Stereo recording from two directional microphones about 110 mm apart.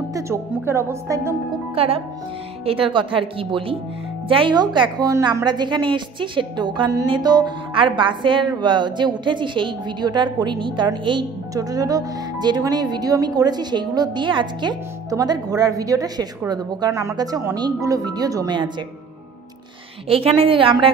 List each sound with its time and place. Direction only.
0.1 s speech: 25° right (ahead or behind)
1.8 s a woman's voice: 60° right (ahead or behind)
11.5 s speech: 35° right (ahead or behind)
15.0 s speech: 35° right (ahead or behind)
20.1 s speech: 60° right (ahead or behind)